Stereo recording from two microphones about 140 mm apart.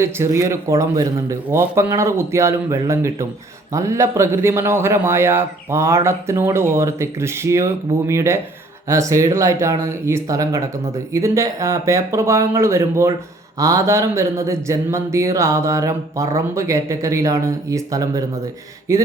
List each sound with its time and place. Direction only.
0.0 s speech: 20° right (ahead or behind)